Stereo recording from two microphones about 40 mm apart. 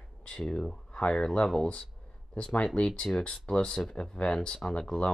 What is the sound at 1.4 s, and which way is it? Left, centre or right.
Speech, centre.